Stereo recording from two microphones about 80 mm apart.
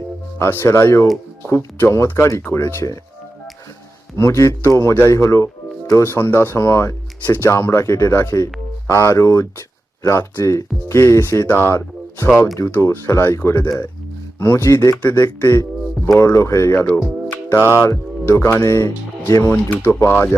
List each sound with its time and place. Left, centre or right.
0.3 s a man's voice: left
4.2 s a man's voice: left
15.0 s a man's voice: left
19.7 s speech: left